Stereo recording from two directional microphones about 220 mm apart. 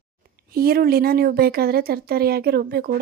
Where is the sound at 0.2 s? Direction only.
45° right (ahead or behind).